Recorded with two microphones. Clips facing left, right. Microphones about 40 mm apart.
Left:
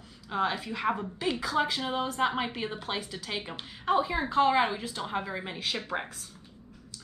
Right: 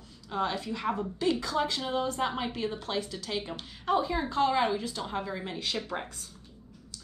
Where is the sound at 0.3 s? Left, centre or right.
Centre.